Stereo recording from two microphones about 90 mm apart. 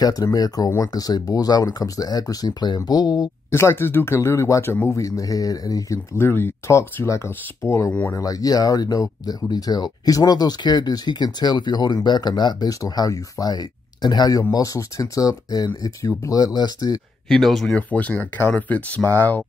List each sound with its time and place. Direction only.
0.0 s speech: 40° left (ahead or behind)
3.5 s speech: 30° left (ahead or behind); by 14.4 s 50° left (ahead or behind)
14.5 s speech: 40° left (ahead or behind)
17.3 s speech: centre (ahead or behind)
17.7 s speech: 15° left (ahead or behind)